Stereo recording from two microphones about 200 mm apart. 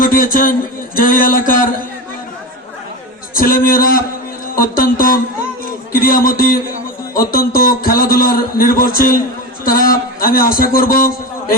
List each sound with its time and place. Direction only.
0.0 s a sound: 45° left (ahead or behind)
0.9 s a man's voice: 45° left (ahead or behind)
3.3 s a man's voice: 45° left (ahead or behind)